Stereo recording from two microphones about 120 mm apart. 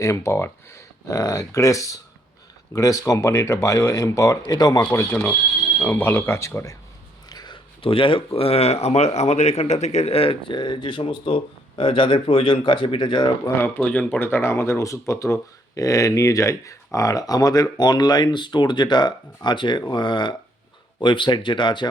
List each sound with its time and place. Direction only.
0.0 s speech: 25° left (ahead or behind)
5.1 s speech: 15° left (ahead or behind)
7.3 s speech: 35° left (ahead or behind)
13.6 s speech: 15° left (ahead or behind); by 21.8 s 40° left (ahead or behind)